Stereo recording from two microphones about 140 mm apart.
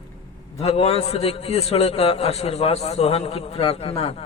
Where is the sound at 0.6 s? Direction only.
45° left (ahead or behind).